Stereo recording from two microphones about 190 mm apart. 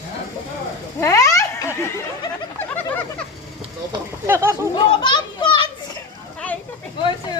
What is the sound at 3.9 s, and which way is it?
Speech, 15° right (ahead or behind).